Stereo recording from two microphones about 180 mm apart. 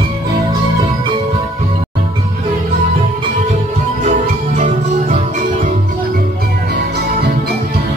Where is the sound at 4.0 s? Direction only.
45° right (ahead or behind).